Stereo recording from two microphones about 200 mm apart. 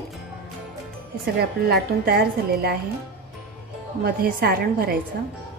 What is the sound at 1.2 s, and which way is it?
A woman's voice, 50° right (ahead or behind).